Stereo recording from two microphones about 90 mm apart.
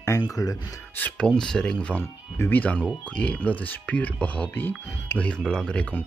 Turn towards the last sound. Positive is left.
turn(degrees=10)  # may be behind; listen again after turning